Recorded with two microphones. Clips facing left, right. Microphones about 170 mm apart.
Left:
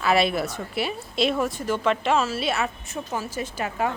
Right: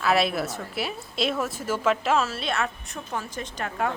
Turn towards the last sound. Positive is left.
turn(degrees=5)  # may be behind; listen again after turning